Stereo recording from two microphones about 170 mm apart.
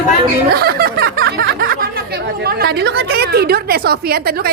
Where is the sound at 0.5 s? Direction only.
65° right (ahead or behind).